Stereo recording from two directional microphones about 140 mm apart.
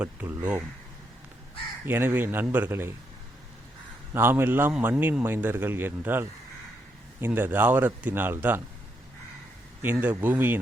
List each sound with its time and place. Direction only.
0.0 s a man's voice: 10° right (ahead or behind)
1.8 s a man's voice: 15° right (ahead or behind)
4.1 s a man's voice: 15° right (ahead or behind)
9.8 s a man's voice: 15° right (ahead or behind)